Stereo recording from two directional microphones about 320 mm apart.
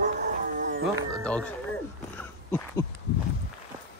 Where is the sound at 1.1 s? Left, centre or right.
Centre.